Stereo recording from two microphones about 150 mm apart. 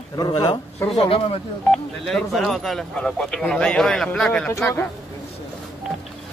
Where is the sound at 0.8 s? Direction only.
40° left (ahead or behind).